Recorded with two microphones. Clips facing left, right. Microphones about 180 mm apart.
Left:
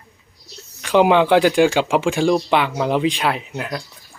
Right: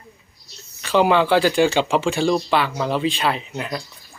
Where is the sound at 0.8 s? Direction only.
15° left (ahead or behind).